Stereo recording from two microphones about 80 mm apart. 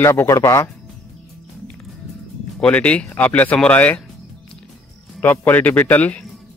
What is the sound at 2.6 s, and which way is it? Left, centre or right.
A man's voice, centre.